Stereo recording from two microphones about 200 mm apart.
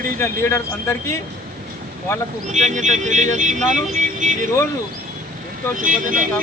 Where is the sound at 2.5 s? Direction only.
35° right (ahead or behind).